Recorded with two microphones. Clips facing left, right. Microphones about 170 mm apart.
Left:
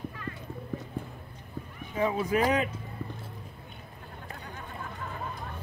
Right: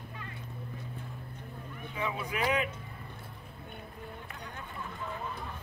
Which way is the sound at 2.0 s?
40° left (ahead or behind).